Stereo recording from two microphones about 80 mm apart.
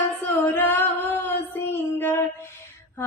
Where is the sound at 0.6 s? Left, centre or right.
Left.